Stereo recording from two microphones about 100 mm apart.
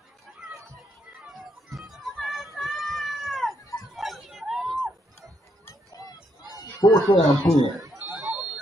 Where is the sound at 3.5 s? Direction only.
35° left (ahead or behind).